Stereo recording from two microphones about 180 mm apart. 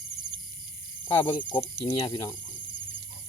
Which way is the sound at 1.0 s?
30° left (ahead or behind).